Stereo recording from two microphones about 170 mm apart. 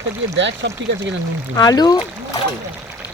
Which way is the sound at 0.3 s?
90° right.